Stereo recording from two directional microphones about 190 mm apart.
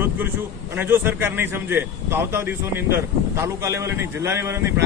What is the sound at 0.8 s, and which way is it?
A man's voice, 10° right (ahead or behind).